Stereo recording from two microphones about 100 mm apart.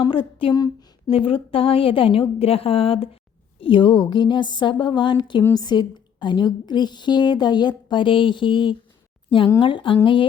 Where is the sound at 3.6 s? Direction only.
55° left (ahead or behind).